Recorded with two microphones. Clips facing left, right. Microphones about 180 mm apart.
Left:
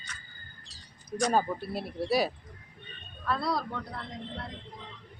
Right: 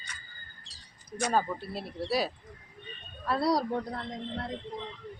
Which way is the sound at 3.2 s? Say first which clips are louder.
Right 4 dB; 35° right (ahead or behind).